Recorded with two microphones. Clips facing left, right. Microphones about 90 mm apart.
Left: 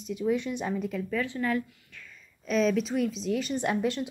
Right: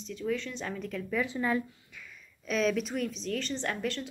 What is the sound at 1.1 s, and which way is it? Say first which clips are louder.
Speech: even; 20° right (ahead or behind).